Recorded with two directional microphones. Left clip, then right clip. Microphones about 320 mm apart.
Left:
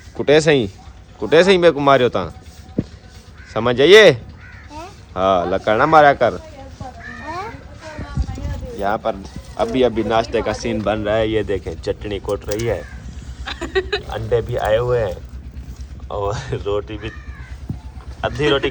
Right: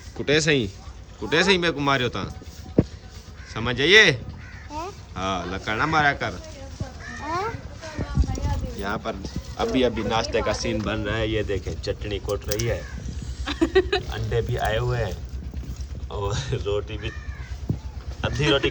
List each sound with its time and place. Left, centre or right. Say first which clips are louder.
0.2 s speech: left 8 dB; centre
3.5 s speech: left 7 dB; centre
8.2 s clip-clop: even; right
8.8 s speech: left 10 dB; centre
13.4 s a sound: right 1 dB; right
14.1 s speech: left 8 dB; centre
17.7 s a sound: right 2 dB; left
18.2 s speech: left 5 dB; centre